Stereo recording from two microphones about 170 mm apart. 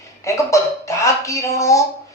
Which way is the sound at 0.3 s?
15° left (ahead or behind).